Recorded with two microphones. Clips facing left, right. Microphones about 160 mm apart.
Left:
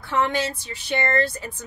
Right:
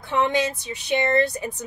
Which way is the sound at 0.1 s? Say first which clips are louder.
Right 2 dB; 15° right (ahead or behind).